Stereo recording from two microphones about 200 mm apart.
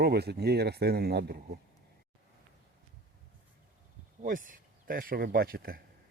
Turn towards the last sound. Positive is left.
turn(degrees=-45)  # may be behind; listen again after turning